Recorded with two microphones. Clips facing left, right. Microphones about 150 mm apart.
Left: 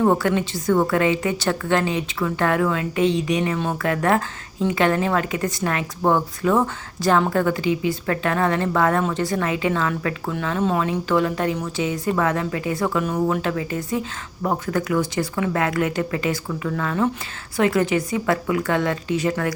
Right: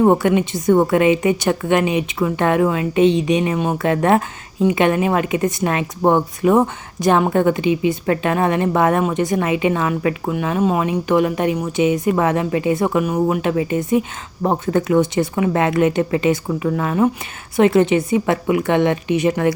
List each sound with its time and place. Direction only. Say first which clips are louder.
0.0 s a woman's voice: right 5 dB; 20° right (ahead or behind)